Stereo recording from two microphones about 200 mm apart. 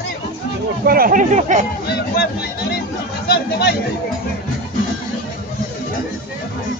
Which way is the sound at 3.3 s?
55° left (ahead or behind).